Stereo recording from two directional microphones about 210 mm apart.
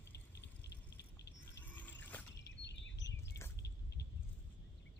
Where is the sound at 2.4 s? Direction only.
55° left (ahead or behind).